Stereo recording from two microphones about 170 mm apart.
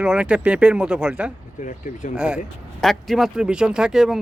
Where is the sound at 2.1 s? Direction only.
5° right (ahead or behind).